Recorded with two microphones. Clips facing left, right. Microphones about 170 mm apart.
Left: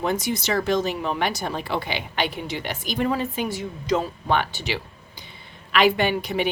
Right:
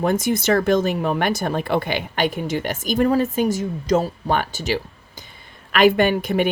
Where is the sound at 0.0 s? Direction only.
50° right (ahead or behind).